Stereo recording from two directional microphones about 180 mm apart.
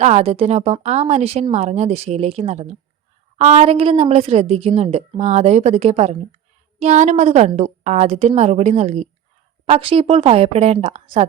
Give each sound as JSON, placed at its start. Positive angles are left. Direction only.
{"t": 0.0, "sound": "a woman's voice", "side_deg": -35}